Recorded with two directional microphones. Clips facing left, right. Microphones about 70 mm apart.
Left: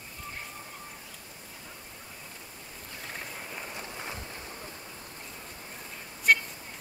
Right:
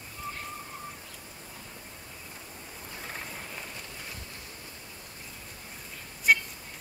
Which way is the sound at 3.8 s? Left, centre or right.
Left.